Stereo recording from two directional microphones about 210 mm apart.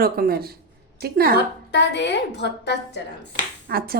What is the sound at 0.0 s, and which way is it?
A woman's voice, 45° right (ahead or behind).